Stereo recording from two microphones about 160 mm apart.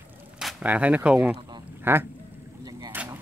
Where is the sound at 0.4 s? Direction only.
5° right (ahead or behind).